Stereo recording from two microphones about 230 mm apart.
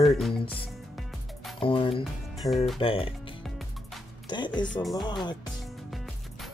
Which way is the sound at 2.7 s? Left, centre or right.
Left.